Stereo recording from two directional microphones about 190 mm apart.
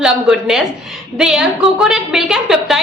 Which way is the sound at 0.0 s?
5° right (ahead or behind).